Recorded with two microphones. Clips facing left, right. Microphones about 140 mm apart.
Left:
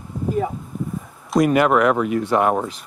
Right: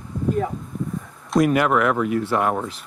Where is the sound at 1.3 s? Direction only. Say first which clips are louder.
Left 2 dB; centre (ahead or behind).